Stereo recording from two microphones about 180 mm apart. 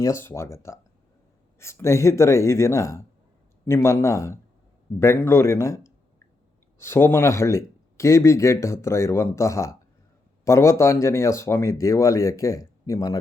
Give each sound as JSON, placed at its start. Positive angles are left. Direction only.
{"t": 0.0, "sound": "speech", "side_deg": 15}